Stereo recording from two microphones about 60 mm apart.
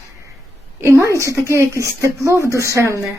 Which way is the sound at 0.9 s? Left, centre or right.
Right.